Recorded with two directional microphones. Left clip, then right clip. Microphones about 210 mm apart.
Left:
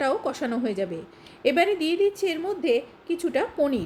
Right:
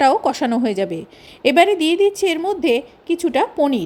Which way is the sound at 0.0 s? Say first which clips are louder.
Right 10 dB; 40° right (ahead or behind).